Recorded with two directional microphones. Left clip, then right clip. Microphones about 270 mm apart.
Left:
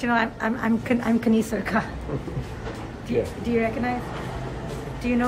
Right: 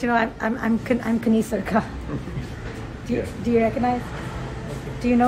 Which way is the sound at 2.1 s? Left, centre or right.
Centre.